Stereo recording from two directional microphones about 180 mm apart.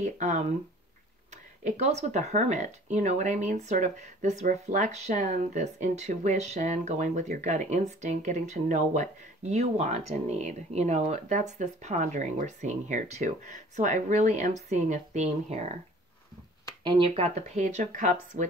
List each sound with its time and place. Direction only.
0.0 s speech: 40° right (ahead or behind)
1.6 s speech: 40° right (ahead or behind)
16.8 s speech: 25° right (ahead or behind); by 18.5 s 45° right (ahead or behind)